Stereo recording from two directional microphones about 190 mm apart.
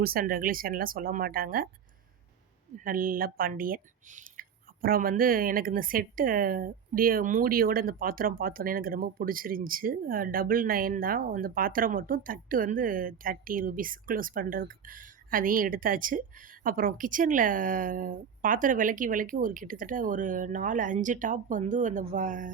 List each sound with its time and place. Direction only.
0.0 s speech: 50° right (ahead or behind)
2.8 s speech: 50° right (ahead or behind)